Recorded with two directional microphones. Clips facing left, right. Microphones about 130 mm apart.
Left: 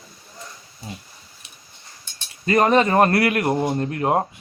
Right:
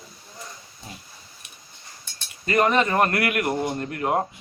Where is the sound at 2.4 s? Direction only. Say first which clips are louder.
Left 4 dB; 35° left (ahead or behind).